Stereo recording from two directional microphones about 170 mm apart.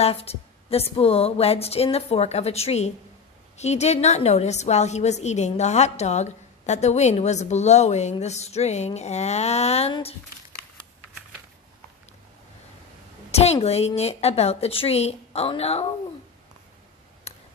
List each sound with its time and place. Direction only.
0.0 s a woman's voice: 35° left (ahead or behind)
13.3 s a woman's voice: 40° left (ahead or behind)
17.3 s a sound: 35° left (ahead or behind)